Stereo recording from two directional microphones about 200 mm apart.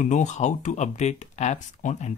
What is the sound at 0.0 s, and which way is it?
Speech, 35° left (ahead or behind).